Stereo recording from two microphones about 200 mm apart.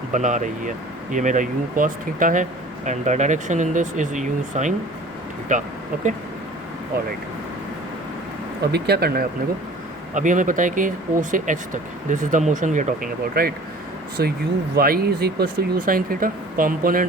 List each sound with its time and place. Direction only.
0.1 s speech: 40° right (ahead or behind)
6.9 s speech: 50° right (ahead or behind)
8.6 s speech: 55° right (ahead or behind)
10.2 s speech: 40° right (ahead or behind)